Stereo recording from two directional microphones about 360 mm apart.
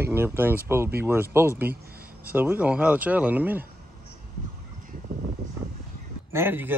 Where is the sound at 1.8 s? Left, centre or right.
Right.